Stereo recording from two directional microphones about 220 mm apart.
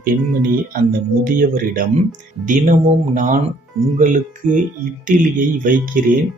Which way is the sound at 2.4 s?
35° right (ahead or behind).